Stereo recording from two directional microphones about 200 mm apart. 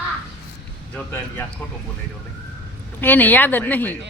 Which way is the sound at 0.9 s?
10° left (ahead or behind).